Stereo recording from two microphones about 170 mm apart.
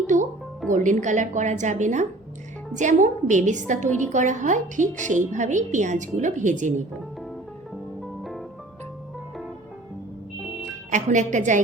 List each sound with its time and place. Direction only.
0.1 s music: 45° right (ahead or behind)
0.7 s a woman's voice: 45° right (ahead or behind)
10.9 s a woman's voice: 45° right (ahead or behind)